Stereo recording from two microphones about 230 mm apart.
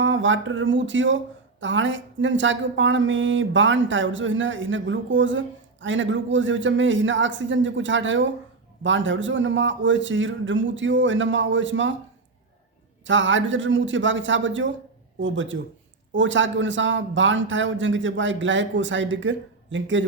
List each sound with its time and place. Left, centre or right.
0.0 s speech: right
13.1 s speech: right